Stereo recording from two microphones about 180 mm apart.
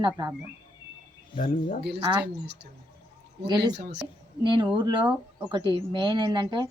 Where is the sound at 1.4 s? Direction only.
50° left (ahead or behind).